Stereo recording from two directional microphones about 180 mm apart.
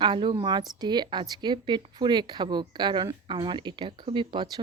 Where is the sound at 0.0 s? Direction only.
25° right (ahead or behind).